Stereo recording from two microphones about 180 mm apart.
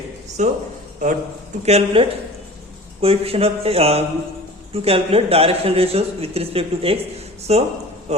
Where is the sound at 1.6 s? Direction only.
35° right (ahead or behind).